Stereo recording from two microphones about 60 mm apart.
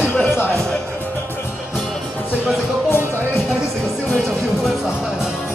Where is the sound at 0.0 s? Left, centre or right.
Left.